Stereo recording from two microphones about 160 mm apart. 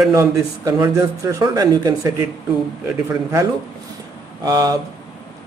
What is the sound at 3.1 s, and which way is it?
Speech, 15° right (ahead or behind).